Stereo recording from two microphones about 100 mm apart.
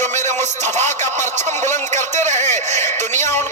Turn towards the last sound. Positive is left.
turn(degrees=25)  # may be behind; listen again after turning